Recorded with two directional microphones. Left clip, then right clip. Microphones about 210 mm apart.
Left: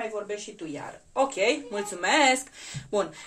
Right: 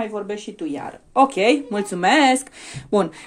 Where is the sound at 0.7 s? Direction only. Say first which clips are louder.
Right 9 dB; 45° right (ahead or behind).